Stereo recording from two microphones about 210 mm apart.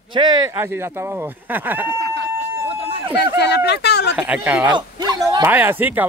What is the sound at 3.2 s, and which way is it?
Speech, 55° left (ahead or behind).